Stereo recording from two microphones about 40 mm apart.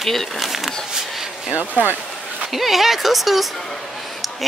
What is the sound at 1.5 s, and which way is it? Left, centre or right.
Speech, right.